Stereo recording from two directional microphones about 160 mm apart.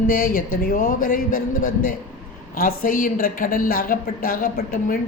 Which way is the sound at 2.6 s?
60° left (ahead or behind).